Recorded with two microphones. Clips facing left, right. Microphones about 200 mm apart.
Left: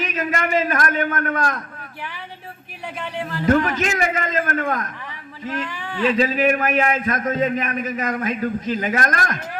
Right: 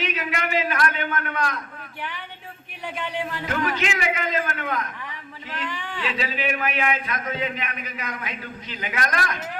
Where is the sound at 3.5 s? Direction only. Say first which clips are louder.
Left 9 dB; 45° left (ahead or behind).